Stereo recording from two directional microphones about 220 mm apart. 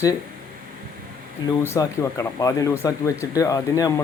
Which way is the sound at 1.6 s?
15° left (ahead or behind).